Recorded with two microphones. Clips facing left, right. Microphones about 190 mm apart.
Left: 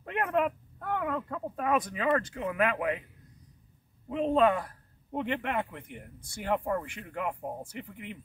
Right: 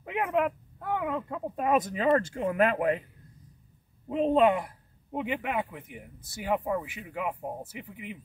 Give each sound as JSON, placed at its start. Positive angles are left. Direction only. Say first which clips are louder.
{"t": 0.0, "sound": "speech", "louder": "right 1 dB", "side_deg": -10}
{"t": 4.1, "sound": "a man's voice", "louder": "right 2 dB", "side_deg": -20}